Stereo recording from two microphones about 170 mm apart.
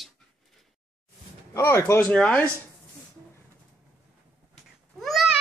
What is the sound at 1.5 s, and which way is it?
Speech, 15° left (ahead or behind).